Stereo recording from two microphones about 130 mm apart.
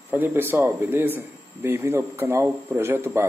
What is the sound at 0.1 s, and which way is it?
Speech, 15° right (ahead or behind).